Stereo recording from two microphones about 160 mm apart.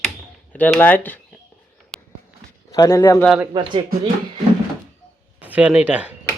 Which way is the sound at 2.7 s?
25° left (ahead or behind).